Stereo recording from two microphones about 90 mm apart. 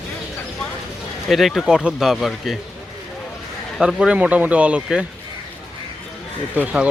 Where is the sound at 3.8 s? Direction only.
5° right (ahead or behind).